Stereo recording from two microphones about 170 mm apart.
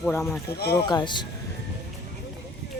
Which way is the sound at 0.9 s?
25° left (ahead or behind).